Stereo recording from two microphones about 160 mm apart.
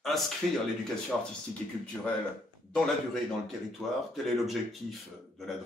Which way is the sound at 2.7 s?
5° left (ahead or behind).